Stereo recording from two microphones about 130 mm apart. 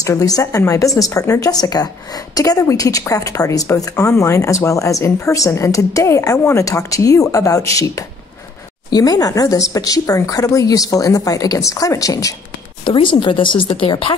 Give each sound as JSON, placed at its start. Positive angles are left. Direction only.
{"t": 0.0, "sound": "speech", "side_deg": 25}
{"t": 12.8, "sound": "a woman's voice", "side_deg": 40}